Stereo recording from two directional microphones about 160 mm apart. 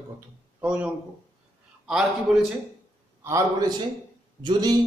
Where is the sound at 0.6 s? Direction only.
5° right (ahead or behind).